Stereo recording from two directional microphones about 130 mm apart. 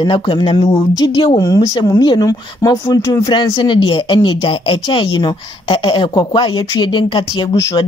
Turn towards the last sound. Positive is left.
turn(degrees=40)  # may be behind; listen again after turning